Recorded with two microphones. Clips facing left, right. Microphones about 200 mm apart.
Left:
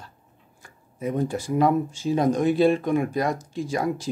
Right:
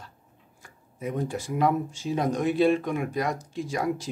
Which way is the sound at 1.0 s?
35° left (ahead or behind).